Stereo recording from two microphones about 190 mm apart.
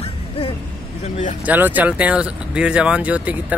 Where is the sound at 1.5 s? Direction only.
10° right (ahead or behind).